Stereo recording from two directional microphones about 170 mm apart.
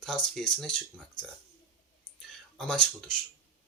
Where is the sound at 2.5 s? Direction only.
5° left (ahead or behind).